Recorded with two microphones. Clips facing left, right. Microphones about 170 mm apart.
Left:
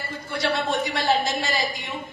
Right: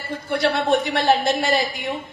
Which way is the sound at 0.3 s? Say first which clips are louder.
Right 6 dB; 60° right (ahead or behind).